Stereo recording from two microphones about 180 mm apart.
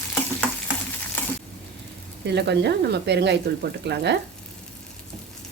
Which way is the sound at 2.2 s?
70° right (ahead or behind).